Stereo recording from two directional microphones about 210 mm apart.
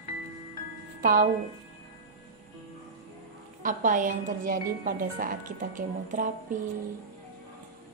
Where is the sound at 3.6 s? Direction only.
40° right (ahead or behind).